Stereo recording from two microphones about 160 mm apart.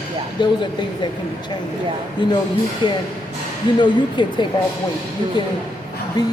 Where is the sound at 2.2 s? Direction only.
30° left (ahead or behind).